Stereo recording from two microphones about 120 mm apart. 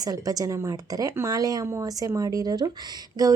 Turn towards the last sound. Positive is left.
turn(degrees=-30)  # may be behind; listen again after turning